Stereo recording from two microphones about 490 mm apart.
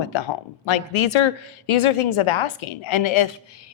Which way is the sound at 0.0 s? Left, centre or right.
Left.